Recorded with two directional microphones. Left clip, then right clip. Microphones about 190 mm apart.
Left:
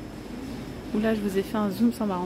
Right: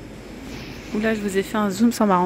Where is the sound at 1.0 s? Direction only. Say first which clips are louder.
Right 4 dB; 10° right (ahead or behind).